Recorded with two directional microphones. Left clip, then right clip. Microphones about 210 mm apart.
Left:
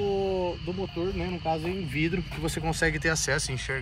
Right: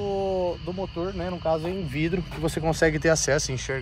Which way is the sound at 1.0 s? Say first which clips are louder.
Right 3 dB; 30° right (ahead or behind).